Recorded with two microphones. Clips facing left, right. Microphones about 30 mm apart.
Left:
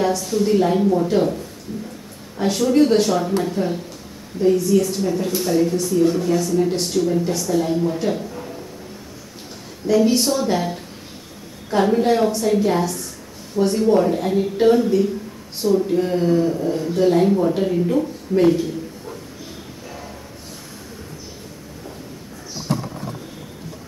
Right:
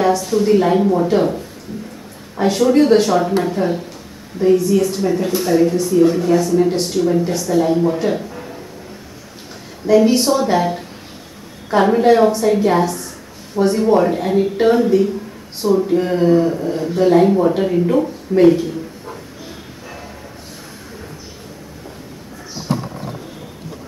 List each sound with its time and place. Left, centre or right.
0.0 s a woman's voice: centre
2.4 s a woman's voice: centre
8.0 s a sound: centre
9.8 s a woman's voice: centre